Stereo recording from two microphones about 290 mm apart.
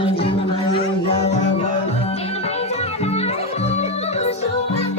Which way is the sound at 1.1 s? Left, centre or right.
Left.